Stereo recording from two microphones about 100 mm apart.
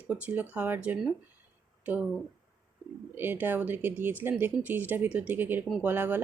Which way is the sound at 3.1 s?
20° right (ahead or behind).